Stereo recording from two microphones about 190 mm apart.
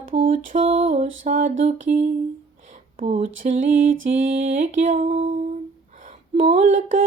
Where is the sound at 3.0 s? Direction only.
40° right (ahead or behind).